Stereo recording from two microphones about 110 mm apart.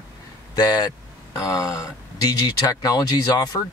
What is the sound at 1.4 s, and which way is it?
Speech, 30° left (ahead or behind).